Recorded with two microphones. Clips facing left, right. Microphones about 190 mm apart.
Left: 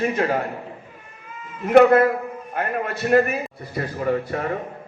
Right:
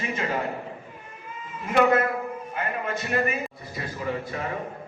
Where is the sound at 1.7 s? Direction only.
55° left (ahead or behind).